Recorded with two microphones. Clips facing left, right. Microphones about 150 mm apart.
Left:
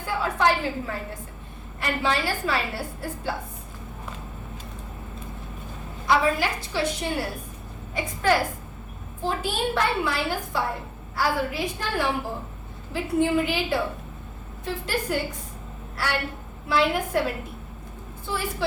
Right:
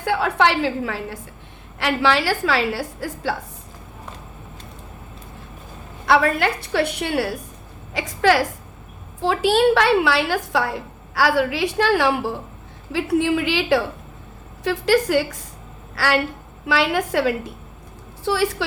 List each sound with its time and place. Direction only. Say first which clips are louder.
0.0 s a woman's voice: right 5 dB; 75° right (ahead or behind); by 3.3 s 90° right
6.1 s a woman's voice: right 4 dB; 65° right (ahead or behind)
7.9 s a woman's voice: right 5 dB; 90° right